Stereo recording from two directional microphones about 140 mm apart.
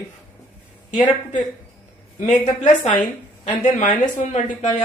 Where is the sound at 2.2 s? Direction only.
55° left (ahead or behind).